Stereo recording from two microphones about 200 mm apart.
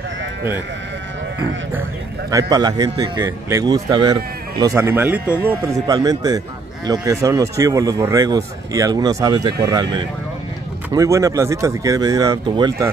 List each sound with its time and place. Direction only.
2.3 s a man's voice: 20° right (ahead or behind)